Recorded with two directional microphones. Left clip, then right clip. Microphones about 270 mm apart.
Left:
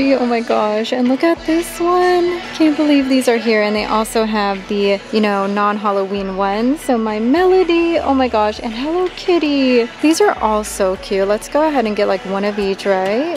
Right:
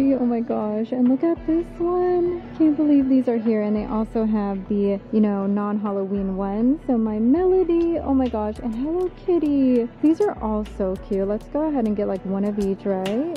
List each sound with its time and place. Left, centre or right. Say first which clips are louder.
0.3 s speech: left 9 dB; centre
8.1 s speech: left 7 dB; centre
9.3 s speech: left 6 dB; centre